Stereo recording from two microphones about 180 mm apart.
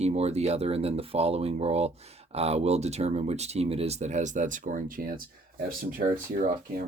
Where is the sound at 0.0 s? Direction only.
35° right (ahead or behind).